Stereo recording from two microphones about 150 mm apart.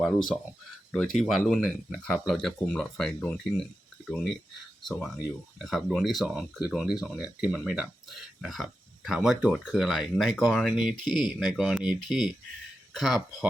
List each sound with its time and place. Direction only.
0.0 s speech: centre (ahead or behind)